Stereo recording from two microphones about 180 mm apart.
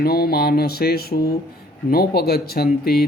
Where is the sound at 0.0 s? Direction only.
60° left (ahead or behind).